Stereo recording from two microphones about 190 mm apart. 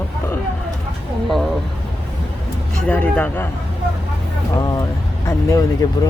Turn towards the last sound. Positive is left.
turn(degrees=15)  # may be behind; listen again after turning